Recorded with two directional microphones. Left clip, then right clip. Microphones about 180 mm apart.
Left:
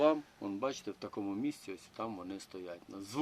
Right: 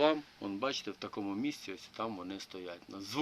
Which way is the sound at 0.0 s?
5° left (ahead or behind).